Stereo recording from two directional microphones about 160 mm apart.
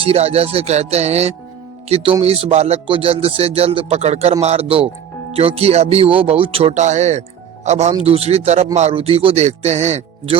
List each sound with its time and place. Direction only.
0.0 s speech: 35° right (ahead or behind)